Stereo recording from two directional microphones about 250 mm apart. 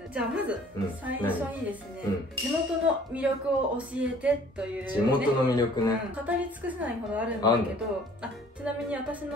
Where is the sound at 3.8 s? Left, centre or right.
Centre.